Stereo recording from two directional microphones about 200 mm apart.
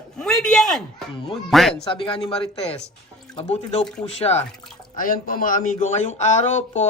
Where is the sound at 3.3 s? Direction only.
35° left (ahead or behind).